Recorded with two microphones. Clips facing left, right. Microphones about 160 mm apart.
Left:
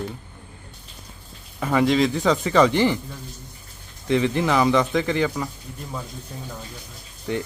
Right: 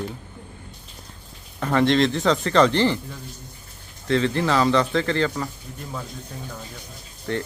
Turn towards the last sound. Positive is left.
turn(degrees=15)  # may be behind; listen again after turning